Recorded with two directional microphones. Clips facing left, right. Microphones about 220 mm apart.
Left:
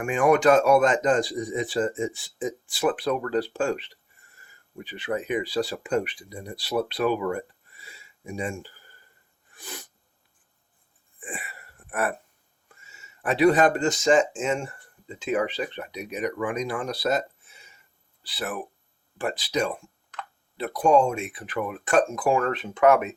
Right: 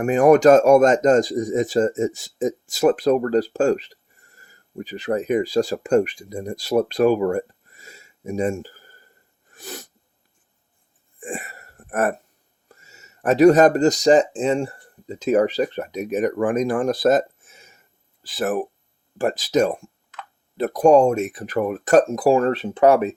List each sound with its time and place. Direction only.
0.0 s speech: 40° right (ahead or behind)
9.5 s sneeze: 40° right (ahead or behind)
11.2 s a sound: 45° right (ahead or behind)
12.6 s speech: 40° right (ahead or behind)
20.1 s a sound: centre (ahead or behind)
20.6 s speech: 40° right (ahead or behind)